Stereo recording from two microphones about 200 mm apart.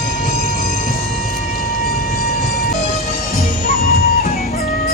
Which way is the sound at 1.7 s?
45° left (ahead or behind).